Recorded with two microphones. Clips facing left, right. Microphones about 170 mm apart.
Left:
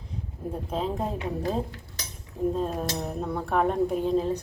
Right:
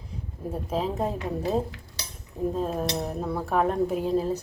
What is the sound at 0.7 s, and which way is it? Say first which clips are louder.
A woman's voice: right 2 dB; 5° right (ahead or behind).